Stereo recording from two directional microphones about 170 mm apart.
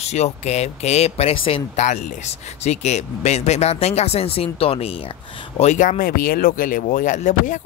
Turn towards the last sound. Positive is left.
turn(degrees=45)  # may be behind; listen again after turning